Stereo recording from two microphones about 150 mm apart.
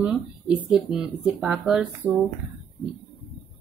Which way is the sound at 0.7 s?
5° right (ahead or behind).